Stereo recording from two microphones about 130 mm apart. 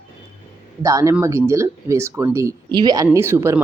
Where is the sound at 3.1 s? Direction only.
20° right (ahead or behind).